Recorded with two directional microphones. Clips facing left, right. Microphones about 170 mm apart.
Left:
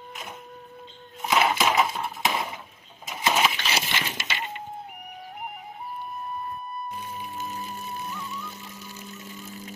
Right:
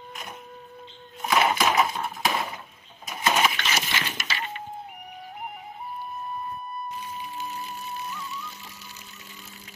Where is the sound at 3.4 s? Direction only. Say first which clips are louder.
Even; 25° left (ahead or behind).